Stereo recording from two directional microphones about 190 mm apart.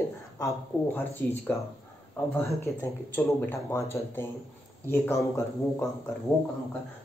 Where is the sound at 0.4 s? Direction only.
15° left (ahead or behind).